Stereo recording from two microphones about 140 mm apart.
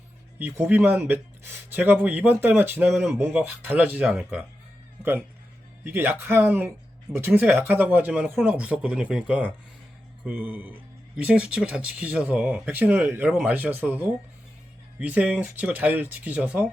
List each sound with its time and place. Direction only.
0.3 s speech: 15° right (ahead or behind)
5.8 s speech: 15° right (ahead or behind)